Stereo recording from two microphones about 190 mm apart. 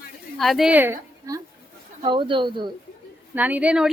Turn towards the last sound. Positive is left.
turn(degrees=-5)  # may be behind; listen again after turning